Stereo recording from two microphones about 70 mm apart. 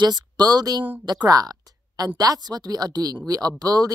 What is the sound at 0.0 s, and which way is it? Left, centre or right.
A woman's voice, right.